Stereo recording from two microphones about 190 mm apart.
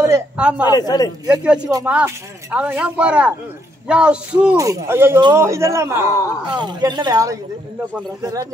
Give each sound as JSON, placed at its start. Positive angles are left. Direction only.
{"t": 0.0, "sound": "a man's voice", "side_deg": -10}
{"t": 0.7, "sound": "a man's voice", "side_deg": 20}
{"t": 1.2, "sound": "speech", "side_deg": -5}
{"t": 4.6, "sound": "a woman's voice", "side_deg": -15}